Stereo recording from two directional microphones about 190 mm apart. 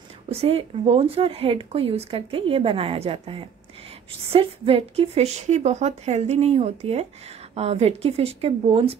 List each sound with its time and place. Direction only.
0.3 s a woman's voice: 30° right (ahead or behind)